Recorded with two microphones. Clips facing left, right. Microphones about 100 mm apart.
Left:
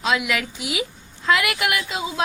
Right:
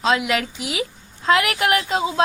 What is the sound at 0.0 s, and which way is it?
A woman's voice, 35° right (ahead or behind).